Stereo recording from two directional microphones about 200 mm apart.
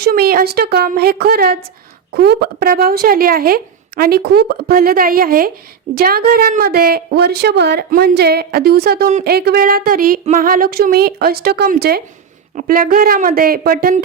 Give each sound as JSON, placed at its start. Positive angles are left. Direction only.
{"t": 0.0, "sound": "speech", "side_deg": -50}